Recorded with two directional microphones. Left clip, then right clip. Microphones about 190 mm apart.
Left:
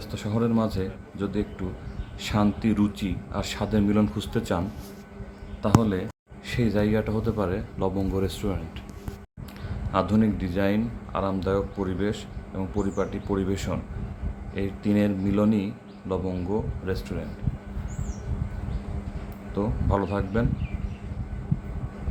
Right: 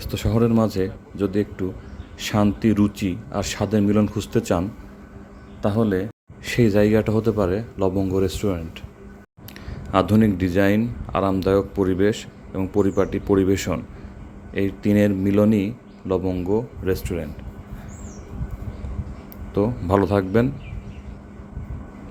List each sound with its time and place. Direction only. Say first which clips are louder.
0.1 s a man's voice: right 6 dB; 40° right (ahead or behind)
5.6 s a man's voice: right 3 dB; 30° right (ahead or behind)
9.9 s a man's voice: right 6 dB; 40° right (ahead or behind)
19.5 s speech: right 7 dB; 45° right (ahead or behind)